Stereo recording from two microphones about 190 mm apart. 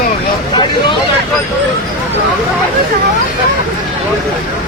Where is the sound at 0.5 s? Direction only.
25° left (ahead or behind).